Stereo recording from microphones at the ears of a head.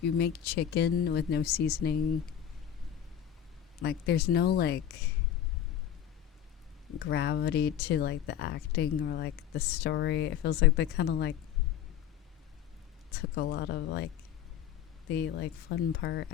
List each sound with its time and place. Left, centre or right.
0.0 s speech: left
3.8 s speech: left
6.8 s speech: left
13.1 s speech: left